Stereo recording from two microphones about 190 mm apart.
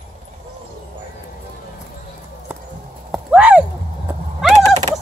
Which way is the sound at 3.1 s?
5° right (ahead or behind).